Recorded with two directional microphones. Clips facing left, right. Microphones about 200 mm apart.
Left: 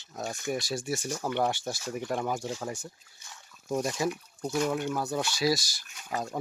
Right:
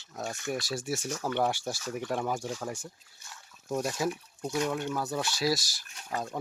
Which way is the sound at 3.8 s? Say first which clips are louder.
Left 1 dB; 5° right (ahead or behind).